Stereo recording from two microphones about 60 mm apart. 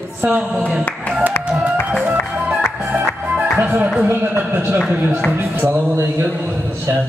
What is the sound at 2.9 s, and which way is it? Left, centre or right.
Music, right.